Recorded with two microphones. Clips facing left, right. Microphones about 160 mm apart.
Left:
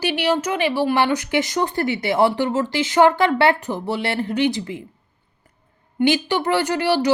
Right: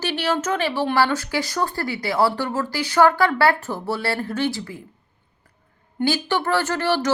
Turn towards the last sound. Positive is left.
turn(degrees=15)  # may be behind; listen again after turning